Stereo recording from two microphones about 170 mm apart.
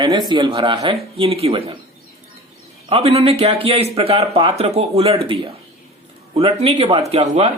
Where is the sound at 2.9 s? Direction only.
35° right (ahead or behind).